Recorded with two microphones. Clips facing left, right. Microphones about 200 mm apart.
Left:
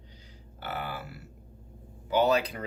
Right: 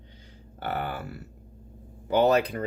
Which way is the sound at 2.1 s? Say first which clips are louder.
Right 3 dB; 55° right (ahead or behind).